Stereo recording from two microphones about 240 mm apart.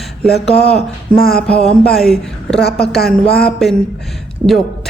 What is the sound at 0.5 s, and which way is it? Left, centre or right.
Speech, left.